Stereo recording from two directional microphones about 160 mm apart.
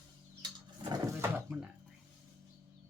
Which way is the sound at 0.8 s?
25° right (ahead or behind).